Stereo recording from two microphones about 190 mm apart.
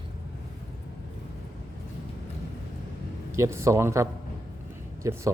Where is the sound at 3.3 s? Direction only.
15° right (ahead or behind).